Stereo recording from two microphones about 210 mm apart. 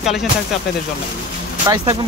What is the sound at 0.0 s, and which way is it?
Speech, centre (ahead or behind).